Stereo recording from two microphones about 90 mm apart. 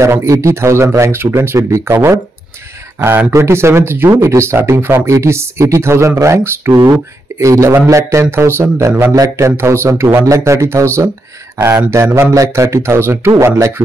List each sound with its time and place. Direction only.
0.0 s speech: 30° right (ahead or behind)
3.3 s speech: 30° right (ahead or behind)
9.1 s speech: 40° right (ahead or behind)
9.6 s speech: 30° right (ahead or behind)
11.5 s speech: 20° right (ahead or behind)
11.9 s speech: 35° right (ahead or behind)